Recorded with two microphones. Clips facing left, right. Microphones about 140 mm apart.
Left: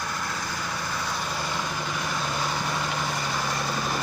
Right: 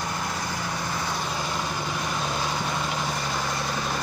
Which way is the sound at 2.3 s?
Centre (ahead or behind).